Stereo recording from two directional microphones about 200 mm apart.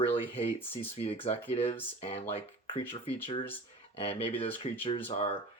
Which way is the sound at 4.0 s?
30° left (ahead or behind).